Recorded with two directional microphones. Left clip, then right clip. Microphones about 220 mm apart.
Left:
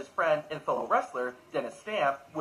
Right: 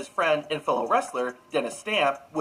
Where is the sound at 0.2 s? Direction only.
45° right (ahead or behind).